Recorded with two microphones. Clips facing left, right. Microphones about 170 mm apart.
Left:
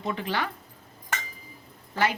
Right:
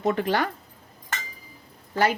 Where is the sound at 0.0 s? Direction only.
50° right (ahead or behind).